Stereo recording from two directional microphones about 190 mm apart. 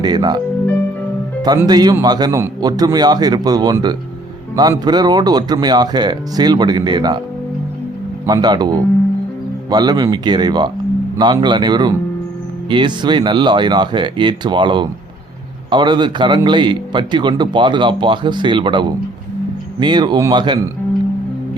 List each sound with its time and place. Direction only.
0.0 s a man's voice: 20° right (ahead or behind)
8.3 s a man's voice: 20° right (ahead or behind)